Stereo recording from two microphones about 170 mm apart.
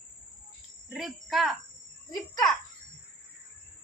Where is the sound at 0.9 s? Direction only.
Centre (ahead or behind).